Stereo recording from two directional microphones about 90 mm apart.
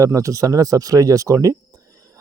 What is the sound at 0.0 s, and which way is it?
Speech, 35° right (ahead or behind).